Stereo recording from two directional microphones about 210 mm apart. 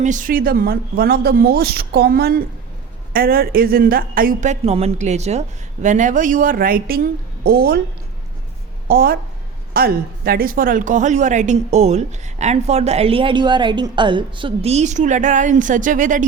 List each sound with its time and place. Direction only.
0.0 s a woman's voice: 40° right (ahead or behind)
8.9 s a woman's voice: 45° right (ahead or behind)